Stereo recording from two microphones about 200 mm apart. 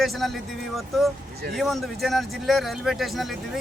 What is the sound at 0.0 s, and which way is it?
Speech, centre (ahead or behind).